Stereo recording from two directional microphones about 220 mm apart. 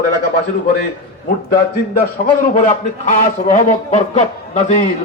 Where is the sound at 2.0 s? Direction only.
40° left (ahead or behind).